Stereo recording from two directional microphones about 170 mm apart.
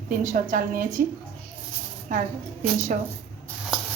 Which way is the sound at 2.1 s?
50° right (ahead or behind).